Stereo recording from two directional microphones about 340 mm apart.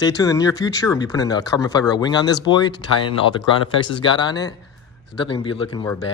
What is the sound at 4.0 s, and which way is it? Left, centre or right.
Speech, centre.